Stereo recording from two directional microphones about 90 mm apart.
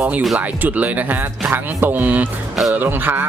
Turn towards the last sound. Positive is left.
turn(degrees=-20)  # may be behind; listen again after turning